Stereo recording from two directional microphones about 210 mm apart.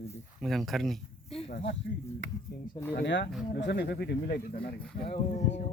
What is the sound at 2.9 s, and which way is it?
Speech, 55° left (ahead or behind).